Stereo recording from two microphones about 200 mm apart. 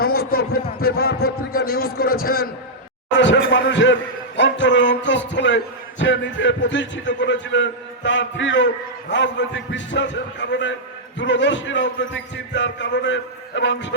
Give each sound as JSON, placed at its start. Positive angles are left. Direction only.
{"t": 0.0, "sound": "a man's voice", "side_deg": 50}
{"t": 3.2, "sound": "a man's voice", "side_deg": 65}